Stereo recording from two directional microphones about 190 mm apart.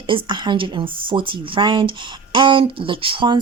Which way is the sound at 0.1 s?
25° right (ahead or behind).